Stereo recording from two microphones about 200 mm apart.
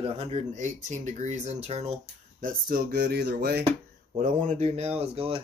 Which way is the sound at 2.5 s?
50° right (ahead or behind).